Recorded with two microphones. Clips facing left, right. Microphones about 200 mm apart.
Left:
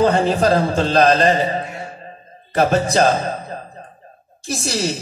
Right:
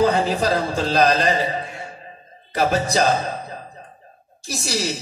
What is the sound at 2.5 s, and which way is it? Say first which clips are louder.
Music: left 4 dB; 50° left (ahead or behind).